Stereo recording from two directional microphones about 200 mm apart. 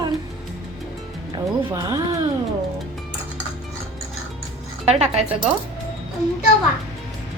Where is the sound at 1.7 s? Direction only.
15° right (ahead or behind).